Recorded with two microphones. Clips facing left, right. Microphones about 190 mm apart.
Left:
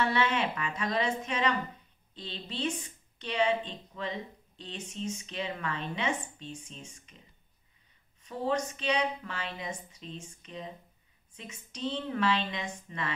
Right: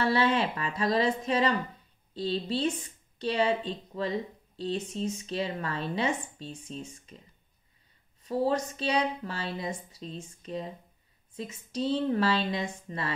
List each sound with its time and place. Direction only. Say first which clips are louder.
0.0 s speech: right 3 dB; 35° right (ahead or behind)
8.2 s speech: right 4 dB; 35° right (ahead or behind)